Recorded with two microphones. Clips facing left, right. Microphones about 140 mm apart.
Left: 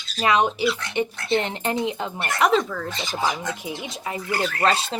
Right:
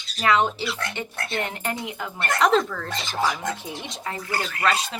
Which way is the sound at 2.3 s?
5° left (ahead or behind).